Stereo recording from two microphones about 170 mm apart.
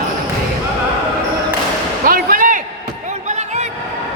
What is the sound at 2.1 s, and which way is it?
Slam, 55° right (ahead or behind).